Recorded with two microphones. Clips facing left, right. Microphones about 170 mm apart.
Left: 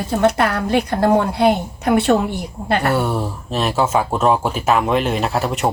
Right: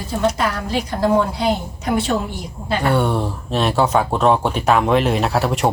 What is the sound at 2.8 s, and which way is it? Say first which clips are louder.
Speech: right 5 dB; 5° left (ahead or behind).